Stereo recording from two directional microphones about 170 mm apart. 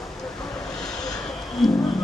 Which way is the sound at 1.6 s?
Centre (ahead or behind).